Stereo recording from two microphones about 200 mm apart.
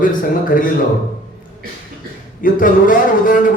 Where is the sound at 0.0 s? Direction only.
40° left (ahead or behind).